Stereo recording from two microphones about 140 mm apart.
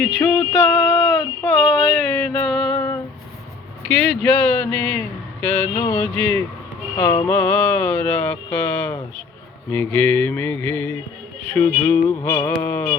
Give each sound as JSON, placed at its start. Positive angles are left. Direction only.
{"t": 0.0, "sound": "a sound", "side_deg": 10}
{"t": 2.5, "sound": "music", "side_deg": 5}
{"t": 3.9, "sound": "speech", "side_deg": 10}
{"t": 11.4, "sound": "music", "side_deg": 15}
{"t": 12.5, "sound": "speech", "side_deg": 15}